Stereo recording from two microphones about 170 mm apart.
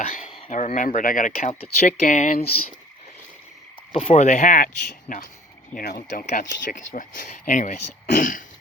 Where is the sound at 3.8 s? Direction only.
35° left (ahead or behind); by 8.5 s 50° left (ahead or behind).